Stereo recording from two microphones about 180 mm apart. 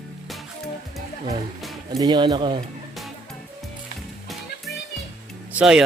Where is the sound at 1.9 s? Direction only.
25° right (ahead or behind).